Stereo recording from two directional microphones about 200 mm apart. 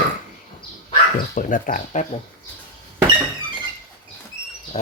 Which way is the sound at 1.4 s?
40° left (ahead or behind).